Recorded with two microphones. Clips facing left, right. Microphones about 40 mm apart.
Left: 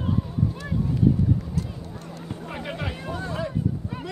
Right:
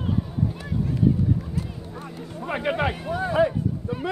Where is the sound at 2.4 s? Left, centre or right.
Right.